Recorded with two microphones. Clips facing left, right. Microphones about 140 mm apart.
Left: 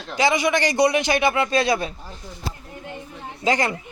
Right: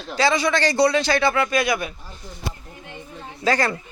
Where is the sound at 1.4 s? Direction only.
30° left (ahead or behind).